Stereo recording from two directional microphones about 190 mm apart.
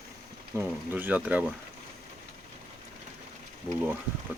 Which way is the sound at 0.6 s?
10° right (ahead or behind).